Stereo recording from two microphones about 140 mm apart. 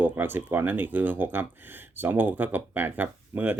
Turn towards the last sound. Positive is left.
turn(degrees=-15)  # may be behind; listen again after turning